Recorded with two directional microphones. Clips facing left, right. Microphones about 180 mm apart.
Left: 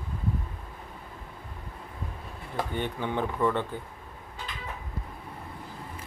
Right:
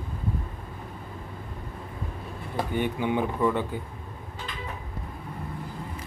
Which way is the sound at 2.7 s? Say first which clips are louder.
Right 5 dB; 10° right (ahead or behind).